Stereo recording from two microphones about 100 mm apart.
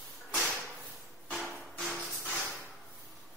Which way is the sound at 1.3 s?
5° left (ahead or behind).